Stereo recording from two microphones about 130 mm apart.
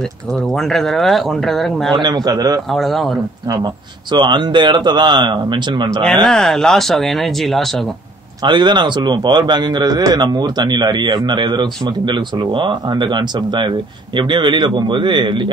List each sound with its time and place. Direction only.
0.3 s speech: 5° left (ahead or behind)
1.9 s a man's voice: 35° right (ahead or behind)
2.7 s speech: centre (ahead or behind)
3.4 s a man's voice: 35° right (ahead or behind)
6.2 s speech: 5° left (ahead or behind)
8.4 s a man's voice: 35° right (ahead or behind)